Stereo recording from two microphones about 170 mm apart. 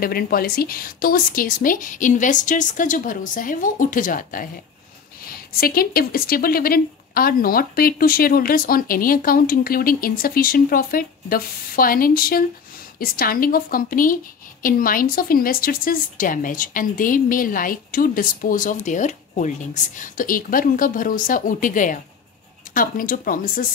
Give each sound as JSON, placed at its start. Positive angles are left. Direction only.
{"t": 0.0, "sound": "a woman's voice", "side_deg": 60}